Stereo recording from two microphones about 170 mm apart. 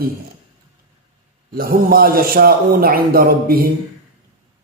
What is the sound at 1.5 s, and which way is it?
A man's voice, 60° right (ahead or behind).